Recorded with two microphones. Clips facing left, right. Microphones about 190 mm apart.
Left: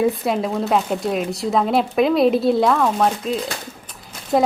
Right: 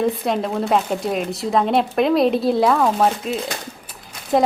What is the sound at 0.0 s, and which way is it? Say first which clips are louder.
Speech: left 1 dB; 5° left (ahead or behind).